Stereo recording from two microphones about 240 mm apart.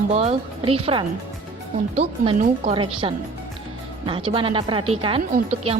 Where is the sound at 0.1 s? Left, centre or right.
Right.